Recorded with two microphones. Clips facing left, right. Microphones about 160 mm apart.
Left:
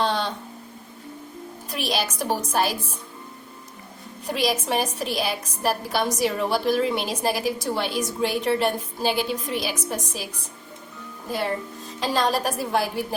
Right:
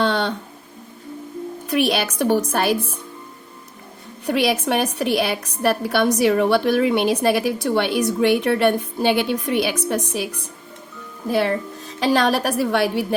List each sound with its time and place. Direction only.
0.0 s a sound: 65° right (ahead or behind)
1.7 s a woman's voice: 60° right (ahead or behind)
4.3 s a woman's voice: 65° right (ahead or behind)
11.3 s a woman's voice: 70° right (ahead or behind)